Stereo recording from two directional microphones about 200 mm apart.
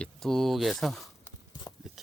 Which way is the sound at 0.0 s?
Centre (ahead or behind).